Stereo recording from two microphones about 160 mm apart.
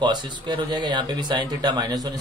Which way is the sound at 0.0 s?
30° right (ahead or behind).